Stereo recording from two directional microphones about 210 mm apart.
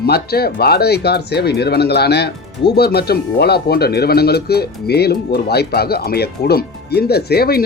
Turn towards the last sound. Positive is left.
turn(degrees=45)  # may be behind; listen again after turning